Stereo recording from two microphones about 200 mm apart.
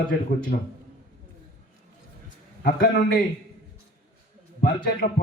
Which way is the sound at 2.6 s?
45° left (ahead or behind).